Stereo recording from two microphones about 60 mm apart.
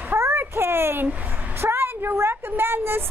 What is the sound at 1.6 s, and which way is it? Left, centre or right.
Vehicle, right.